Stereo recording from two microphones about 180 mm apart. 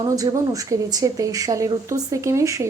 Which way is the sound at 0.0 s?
20° right (ahead or behind).